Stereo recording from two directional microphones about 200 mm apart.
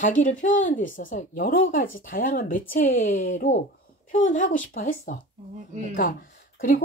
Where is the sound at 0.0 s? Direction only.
40° left (ahead or behind).